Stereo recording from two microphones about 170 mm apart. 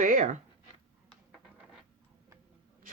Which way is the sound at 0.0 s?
50° right (ahead or behind).